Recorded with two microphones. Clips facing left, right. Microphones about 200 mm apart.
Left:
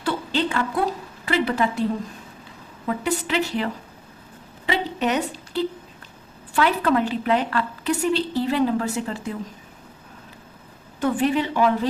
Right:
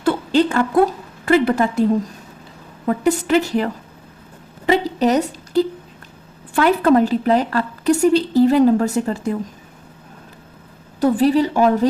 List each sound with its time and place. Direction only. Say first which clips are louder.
0.0 s a sound: right 8 dB; 45° right (ahead or behind)
1.2 s a woman's voice: right 7 dB; 50° right (ahead or behind)
2.8 s a woman's voice: right 7 dB; 45° right (ahead or behind)
11.0 s a woman's voice: right 6 dB; 35° right (ahead or behind)